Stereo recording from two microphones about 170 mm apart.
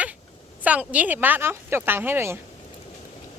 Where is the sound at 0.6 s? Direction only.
10° right (ahead or behind).